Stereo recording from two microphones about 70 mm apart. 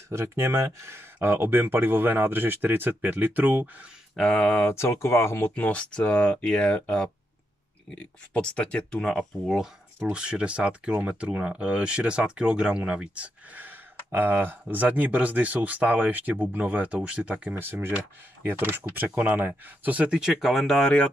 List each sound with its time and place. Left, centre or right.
0.1 s speech: right
4.2 s speech: left
5.5 s speech: centre
10.1 s speech: centre
17.6 s speech: right; by 20.9 s centre